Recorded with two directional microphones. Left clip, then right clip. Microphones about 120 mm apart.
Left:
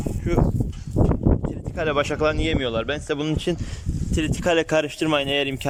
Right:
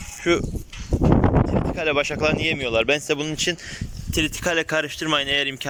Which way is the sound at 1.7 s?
Centre (ahead or behind).